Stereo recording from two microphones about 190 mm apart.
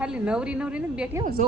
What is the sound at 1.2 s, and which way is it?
Speech, 45° right (ahead or behind).